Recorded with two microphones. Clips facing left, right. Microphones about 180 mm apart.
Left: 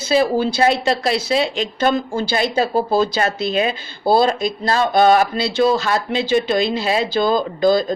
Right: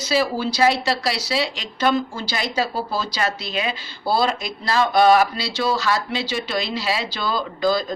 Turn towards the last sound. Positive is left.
turn(degrees=50)  # may be behind; listen again after turning